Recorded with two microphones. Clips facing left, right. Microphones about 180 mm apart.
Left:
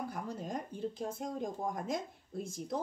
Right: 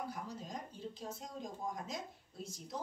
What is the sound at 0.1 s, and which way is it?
Speech, 55° left (ahead or behind).